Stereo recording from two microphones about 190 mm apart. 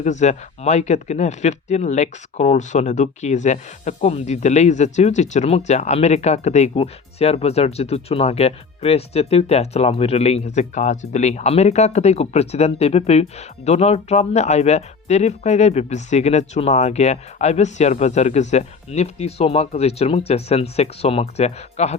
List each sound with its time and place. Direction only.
0.0 s speech: 40° left (ahead or behind)